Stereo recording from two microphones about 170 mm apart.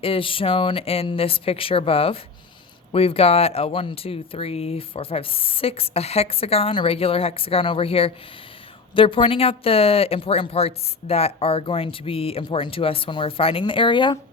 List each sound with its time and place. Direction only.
0.0 s speech: 30° left (ahead or behind)